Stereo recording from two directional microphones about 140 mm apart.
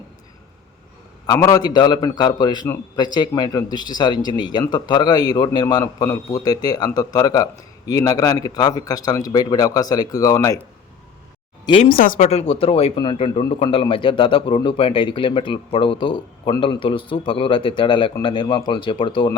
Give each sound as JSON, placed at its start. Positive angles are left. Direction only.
{"t": 1.3, "sound": "a man's voice", "side_deg": 25}
{"t": 11.6, "sound": "speech", "side_deg": 40}
{"t": 11.9, "sound": "speech", "side_deg": 85}
{"t": 12.3, "sound": "a man's voice", "side_deg": 45}